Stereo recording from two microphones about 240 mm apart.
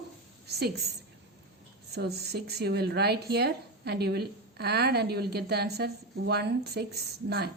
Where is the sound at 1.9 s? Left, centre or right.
Right.